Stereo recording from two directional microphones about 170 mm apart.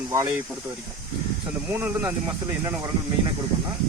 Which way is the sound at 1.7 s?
10° right (ahead or behind).